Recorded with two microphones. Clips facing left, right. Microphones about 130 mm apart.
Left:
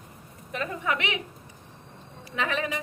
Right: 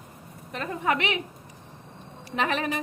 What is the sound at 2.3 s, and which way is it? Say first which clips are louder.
Speech: right 2 dB; 35° right (ahead or behind).